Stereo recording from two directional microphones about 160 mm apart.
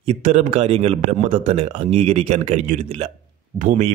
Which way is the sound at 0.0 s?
40° right (ahead or behind).